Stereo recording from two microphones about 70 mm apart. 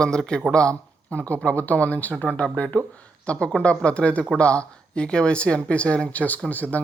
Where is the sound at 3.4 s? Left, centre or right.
Centre.